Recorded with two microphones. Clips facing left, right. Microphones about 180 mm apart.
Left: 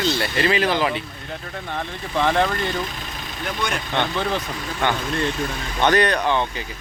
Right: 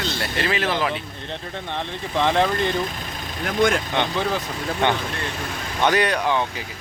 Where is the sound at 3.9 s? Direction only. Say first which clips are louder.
Even; 15° right (ahead or behind).